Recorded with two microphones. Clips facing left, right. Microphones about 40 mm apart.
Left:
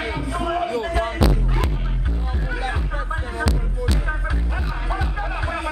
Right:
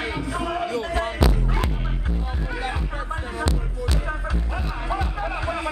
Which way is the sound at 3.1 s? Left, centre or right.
Centre.